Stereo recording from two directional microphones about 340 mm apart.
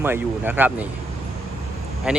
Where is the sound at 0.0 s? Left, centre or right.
Centre.